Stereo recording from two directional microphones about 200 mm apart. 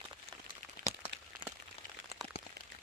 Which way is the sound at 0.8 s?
40° right (ahead or behind).